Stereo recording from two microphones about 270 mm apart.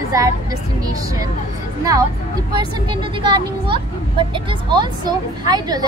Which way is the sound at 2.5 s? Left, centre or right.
Centre.